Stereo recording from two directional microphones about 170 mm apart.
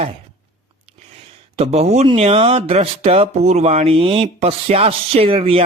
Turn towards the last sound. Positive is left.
turn(degrees=-35)  # may be behind; listen again after turning